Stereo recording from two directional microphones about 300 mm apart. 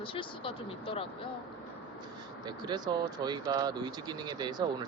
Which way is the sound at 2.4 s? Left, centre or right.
Centre.